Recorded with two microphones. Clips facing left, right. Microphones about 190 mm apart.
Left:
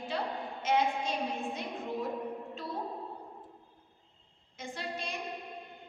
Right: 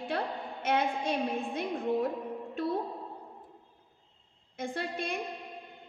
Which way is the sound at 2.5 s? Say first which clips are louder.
Right 8 dB; 55° right (ahead or behind).